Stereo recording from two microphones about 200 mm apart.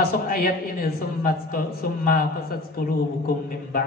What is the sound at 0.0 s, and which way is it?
A man's voice, 45° left (ahead or behind).